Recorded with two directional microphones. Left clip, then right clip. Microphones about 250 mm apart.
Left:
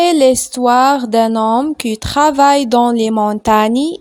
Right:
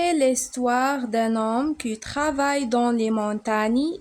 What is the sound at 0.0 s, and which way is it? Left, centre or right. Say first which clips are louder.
Speech: left 11 dB; left.